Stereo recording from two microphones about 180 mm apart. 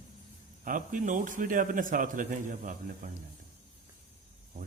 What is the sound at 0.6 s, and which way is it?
Speech, 50° right (ahead or behind).